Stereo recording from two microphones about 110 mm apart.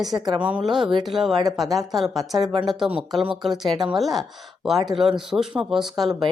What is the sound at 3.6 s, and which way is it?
Speech, 40° right (ahead or behind).